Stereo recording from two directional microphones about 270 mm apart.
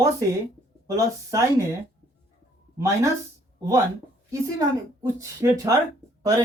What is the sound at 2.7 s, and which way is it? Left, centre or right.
Speech, centre.